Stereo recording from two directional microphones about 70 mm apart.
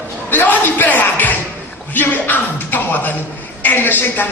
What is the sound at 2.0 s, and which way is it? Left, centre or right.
Music, left.